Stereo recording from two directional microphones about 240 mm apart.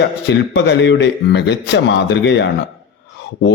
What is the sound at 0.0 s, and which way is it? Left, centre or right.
Speech, left.